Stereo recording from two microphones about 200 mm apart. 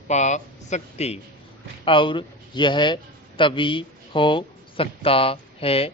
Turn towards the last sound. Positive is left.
turn(degrees=30)  # may be behind; listen again after turning